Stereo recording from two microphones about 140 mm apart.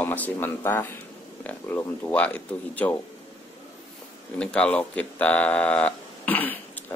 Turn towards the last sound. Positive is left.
turn(degrees=15)  # may be behind; listen again after turning